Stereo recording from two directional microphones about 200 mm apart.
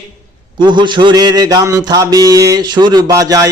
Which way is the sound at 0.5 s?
25° right (ahead or behind).